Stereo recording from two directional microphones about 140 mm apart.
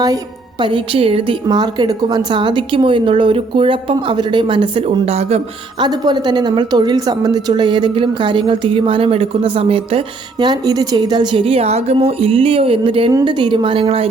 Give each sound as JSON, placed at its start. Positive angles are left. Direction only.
{"t": 0.6, "sound": "a woman's voice", "side_deg": -40}
{"t": 1.5, "sound": "a woman's voice", "side_deg": -30}
{"t": 5.0, "sound": "speech", "side_deg": -50}
{"t": 5.8, "sound": "a woman's voice", "side_deg": -30}
{"t": 10.4, "sound": "a woman's voice", "side_deg": -30}